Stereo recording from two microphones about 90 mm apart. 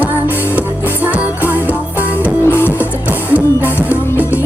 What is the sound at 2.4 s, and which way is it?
Music, 25° left (ahead or behind).